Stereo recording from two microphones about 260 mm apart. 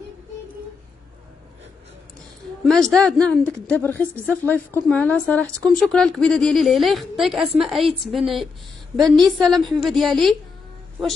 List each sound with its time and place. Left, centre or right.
2.6 s a woman's voice: centre